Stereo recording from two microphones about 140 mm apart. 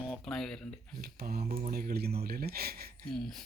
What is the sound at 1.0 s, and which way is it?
Speech, 90° right.